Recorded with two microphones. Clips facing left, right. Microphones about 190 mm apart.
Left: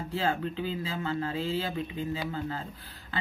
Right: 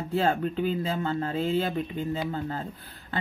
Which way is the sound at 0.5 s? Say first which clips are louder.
Right 6 dB; 40° right (ahead or behind).